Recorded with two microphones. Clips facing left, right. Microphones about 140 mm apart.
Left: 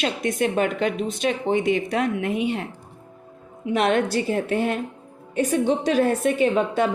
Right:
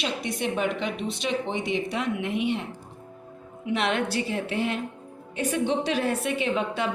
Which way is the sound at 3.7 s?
45° left (ahead or behind).